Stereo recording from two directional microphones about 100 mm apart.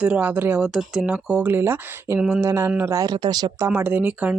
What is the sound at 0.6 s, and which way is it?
Speech, 5° right (ahead or behind).